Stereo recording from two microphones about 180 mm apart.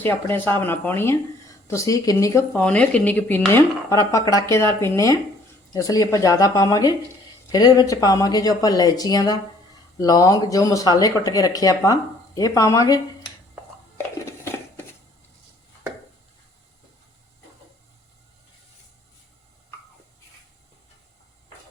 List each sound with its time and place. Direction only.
0.0 s speech: 10° left (ahead or behind)